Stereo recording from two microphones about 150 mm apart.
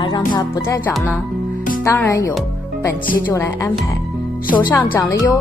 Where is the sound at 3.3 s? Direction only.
15° left (ahead or behind).